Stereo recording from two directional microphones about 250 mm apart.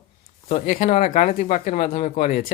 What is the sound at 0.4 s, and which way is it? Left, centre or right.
Speech, left.